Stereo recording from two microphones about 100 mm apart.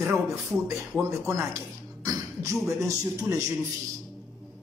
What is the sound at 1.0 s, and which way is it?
A man's voice, 30° right (ahead or behind).